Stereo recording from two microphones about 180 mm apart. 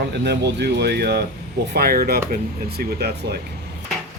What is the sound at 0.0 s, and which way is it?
Speech, 70° right (ahead or behind).